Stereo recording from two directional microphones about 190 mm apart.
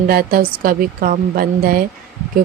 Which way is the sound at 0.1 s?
50° right (ahead or behind).